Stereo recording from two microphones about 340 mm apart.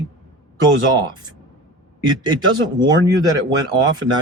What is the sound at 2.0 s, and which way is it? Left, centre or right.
Speech, centre.